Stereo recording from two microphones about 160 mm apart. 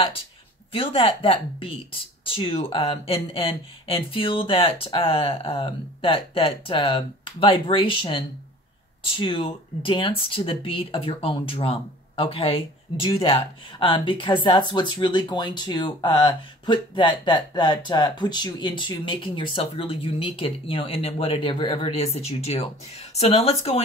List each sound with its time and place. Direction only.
0.7 s speech: 35° left (ahead or behind)